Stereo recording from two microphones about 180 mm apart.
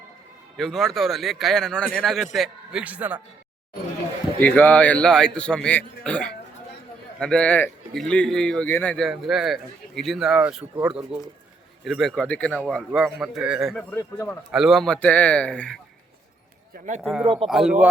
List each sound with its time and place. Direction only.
0.5 s a man's voice: centre (ahead or behind)
4.4 s a man's voice: 10° left (ahead or behind)
11.9 s a man's voice: centre (ahead or behind)
13.9 s a man's voice: 15° left (ahead or behind)
14.5 s a man's voice: centre (ahead or behind)
16.7 s speech: 45° right (ahead or behind)
17.0 s a man's voice: centre (ahead or behind)